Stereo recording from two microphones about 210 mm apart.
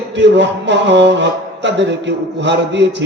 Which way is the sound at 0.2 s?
55° right (ahead or behind).